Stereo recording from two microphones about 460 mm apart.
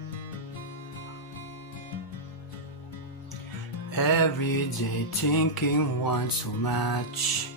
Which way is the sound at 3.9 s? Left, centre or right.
Left.